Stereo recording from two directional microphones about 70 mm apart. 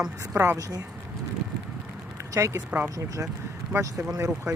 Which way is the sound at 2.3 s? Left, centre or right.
Right.